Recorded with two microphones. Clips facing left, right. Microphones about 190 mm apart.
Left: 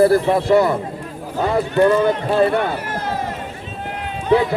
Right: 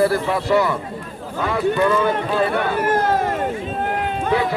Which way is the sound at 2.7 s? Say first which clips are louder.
Right 6 dB; 50° right (ahead or behind).